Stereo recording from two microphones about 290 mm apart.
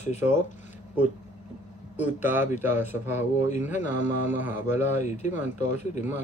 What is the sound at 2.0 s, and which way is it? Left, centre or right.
Speech, centre.